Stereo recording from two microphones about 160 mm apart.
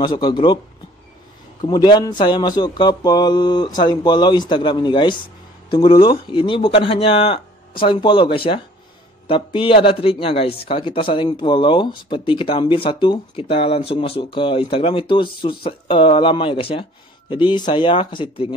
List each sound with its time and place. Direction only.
0.0 s speech: 30° left (ahead or behind)
1.9 s speech: 25° left (ahead or behind)